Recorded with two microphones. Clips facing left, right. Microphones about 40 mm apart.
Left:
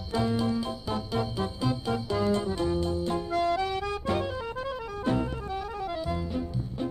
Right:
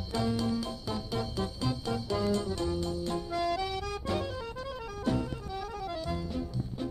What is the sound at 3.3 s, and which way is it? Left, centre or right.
Music, left.